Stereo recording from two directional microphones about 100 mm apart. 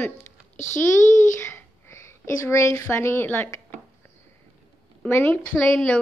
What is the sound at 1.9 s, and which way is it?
Speech, 30° left (ahead or behind).